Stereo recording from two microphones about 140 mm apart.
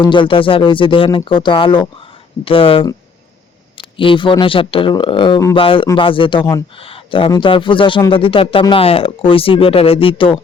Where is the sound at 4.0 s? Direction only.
35° left (ahead or behind).